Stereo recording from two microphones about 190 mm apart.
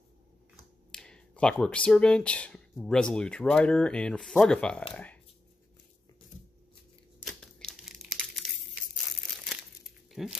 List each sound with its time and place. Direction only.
0.9 s speech: 5° left (ahead or behind)
7.2 s crumpling: 5° left (ahead or behind)
10.1 s speech: centre (ahead or behind)